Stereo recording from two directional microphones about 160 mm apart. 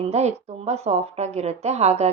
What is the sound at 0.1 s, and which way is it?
A woman's voice, 45° right (ahead or behind).